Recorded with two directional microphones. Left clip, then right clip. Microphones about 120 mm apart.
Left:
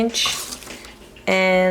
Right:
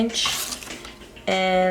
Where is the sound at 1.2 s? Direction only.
45° left (ahead or behind).